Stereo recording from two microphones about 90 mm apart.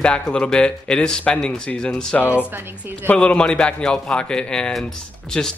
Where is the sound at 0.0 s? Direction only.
10° left (ahead or behind).